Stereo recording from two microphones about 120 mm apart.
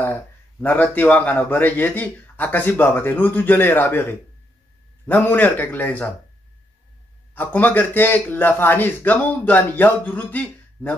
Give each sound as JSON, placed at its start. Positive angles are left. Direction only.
{"t": 0.0, "sound": "speech", "side_deg": 15}
{"t": 7.3, "sound": "speech", "side_deg": 15}